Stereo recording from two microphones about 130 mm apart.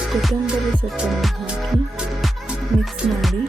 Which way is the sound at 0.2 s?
Centre (ahead or behind).